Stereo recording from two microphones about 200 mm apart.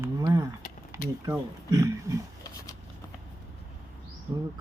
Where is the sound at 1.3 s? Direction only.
15° right (ahead or behind).